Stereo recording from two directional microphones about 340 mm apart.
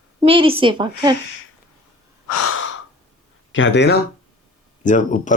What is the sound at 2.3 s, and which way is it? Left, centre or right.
Breathing, left.